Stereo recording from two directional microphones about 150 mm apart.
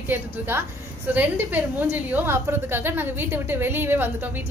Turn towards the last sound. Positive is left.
turn(degrees=-15)  # may be behind; listen again after turning